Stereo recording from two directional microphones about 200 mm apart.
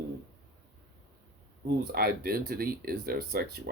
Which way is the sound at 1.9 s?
50° right (ahead or behind).